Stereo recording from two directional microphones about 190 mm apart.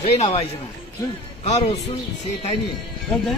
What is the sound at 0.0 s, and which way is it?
Speech, 30° left (ahead or behind).